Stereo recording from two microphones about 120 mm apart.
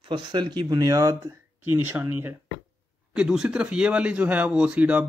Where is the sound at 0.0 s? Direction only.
40° right (ahead or behind).